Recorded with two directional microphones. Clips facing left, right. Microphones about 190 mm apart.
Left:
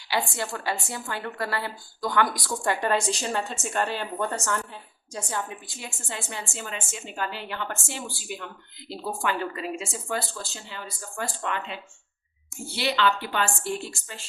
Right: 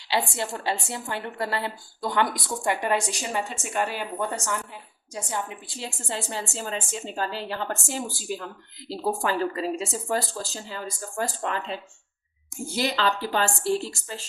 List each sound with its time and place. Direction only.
0.1 s a woman's voice: 25° right (ahead or behind)
5.6 s speech: 30° right (ahead or behind)